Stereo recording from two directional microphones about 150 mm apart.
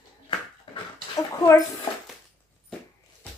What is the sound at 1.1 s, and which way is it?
Speech, 20° left (ahead or behind).